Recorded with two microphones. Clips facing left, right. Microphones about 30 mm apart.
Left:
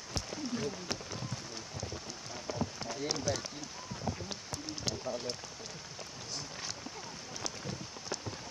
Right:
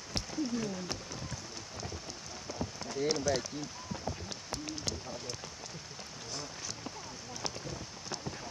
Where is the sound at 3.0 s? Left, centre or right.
Centre.